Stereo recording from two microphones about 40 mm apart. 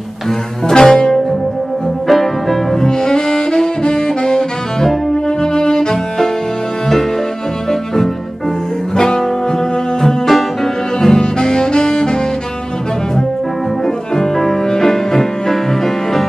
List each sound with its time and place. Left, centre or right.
0.7 s music: centre
2.0 s saxophone: centre
4.8 s music: centre
8.9 s music: centre
10.0 s bowed string instrument: centre
13.8 s music: centre